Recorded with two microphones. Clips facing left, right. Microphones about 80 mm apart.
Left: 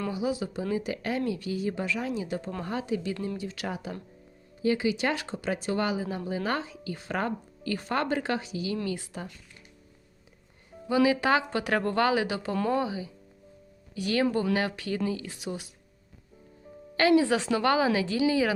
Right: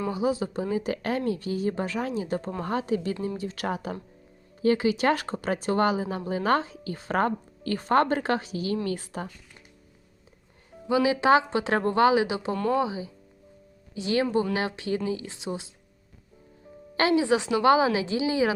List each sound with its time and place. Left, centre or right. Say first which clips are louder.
0.1 s speech: right 3 dB; right
10.8 s a woman's voice: right 2 dB; right
17.0 s a woman's voice: even; right